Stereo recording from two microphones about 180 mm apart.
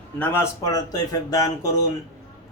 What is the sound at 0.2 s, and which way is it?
Speech, 15° left (ahead or behind).